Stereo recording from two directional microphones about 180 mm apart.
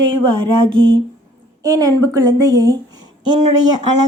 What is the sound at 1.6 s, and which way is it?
Speech, 20° right (ahead or behind).